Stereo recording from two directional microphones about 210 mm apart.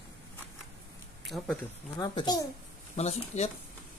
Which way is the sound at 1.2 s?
Centre (ahead or behind).